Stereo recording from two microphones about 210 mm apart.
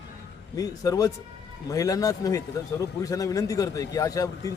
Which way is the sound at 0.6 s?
15° left (ahead or behind).